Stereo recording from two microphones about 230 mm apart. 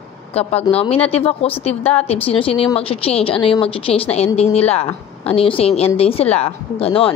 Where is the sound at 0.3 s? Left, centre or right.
Left.